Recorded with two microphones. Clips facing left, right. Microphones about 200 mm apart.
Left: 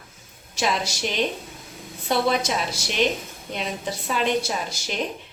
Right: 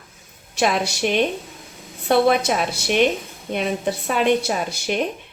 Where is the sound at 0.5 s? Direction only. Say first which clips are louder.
Right 5 dB; 60° right (ahead or behind).